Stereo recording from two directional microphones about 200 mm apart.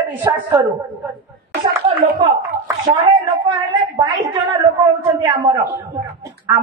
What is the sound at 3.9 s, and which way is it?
A woman's voice, 15° right (ahead or behind).